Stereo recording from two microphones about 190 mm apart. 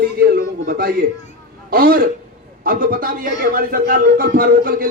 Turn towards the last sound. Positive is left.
turn(degrees=-50)  # may be behind; listen again after turning